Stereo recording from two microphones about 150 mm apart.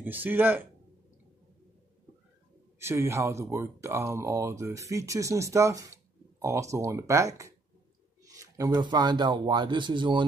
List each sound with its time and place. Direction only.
0.0 s speech: 10° right (ahead or behind)
2.8 s speech: 15° right (ahead or behind)